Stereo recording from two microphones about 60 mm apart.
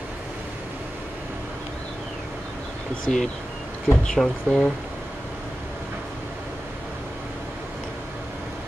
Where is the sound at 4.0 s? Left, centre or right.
Centre.